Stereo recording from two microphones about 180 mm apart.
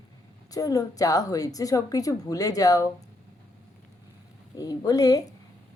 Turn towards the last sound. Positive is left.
turn(degrees=20)  # may be behind; listen again after turning